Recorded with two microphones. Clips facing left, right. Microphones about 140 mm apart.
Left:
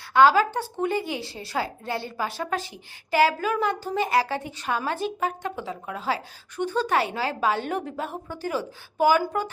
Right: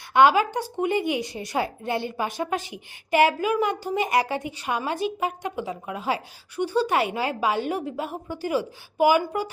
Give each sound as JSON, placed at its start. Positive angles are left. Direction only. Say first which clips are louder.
{"t": 0.1, "sound": "speech", "louder": "even", "side_deg": -15}